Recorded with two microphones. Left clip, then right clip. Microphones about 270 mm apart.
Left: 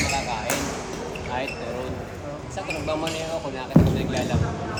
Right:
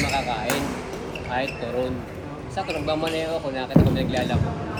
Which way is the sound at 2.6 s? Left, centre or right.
Right.